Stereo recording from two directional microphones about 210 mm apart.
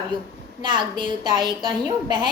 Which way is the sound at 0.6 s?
20° right (ahead or behind).